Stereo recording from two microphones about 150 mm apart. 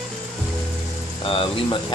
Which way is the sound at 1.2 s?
35° left (ahead or behind).